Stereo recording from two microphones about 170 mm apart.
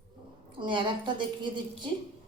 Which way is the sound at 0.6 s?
30° right (ahead or behind).